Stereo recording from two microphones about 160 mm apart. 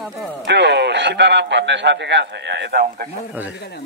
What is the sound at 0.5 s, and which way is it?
A man's voice, 90° right.